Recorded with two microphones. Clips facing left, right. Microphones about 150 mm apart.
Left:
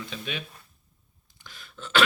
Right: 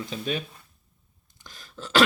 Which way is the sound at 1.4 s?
40° right (ahead or behind).